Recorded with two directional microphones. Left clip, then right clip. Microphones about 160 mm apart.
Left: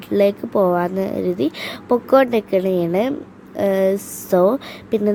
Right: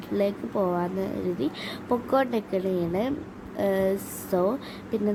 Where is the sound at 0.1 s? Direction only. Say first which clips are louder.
Left 10 dB; 50° left (ahead or behind).